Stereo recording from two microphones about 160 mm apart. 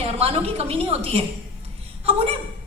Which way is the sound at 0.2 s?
40° right (ahead or behind).